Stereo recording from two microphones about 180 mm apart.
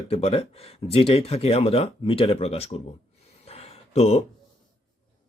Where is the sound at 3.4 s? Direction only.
35° left (ahead or behind).